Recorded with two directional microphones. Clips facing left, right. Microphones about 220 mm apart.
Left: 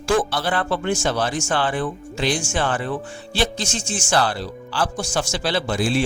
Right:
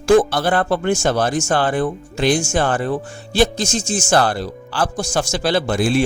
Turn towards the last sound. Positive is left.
turn(degrees=-50)  # may be behind; listen again after turning